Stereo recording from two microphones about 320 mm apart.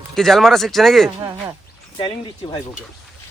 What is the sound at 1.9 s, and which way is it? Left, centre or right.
Speech, centre.